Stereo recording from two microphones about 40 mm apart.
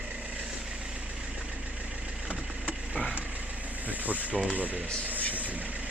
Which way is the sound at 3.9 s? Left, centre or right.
Right.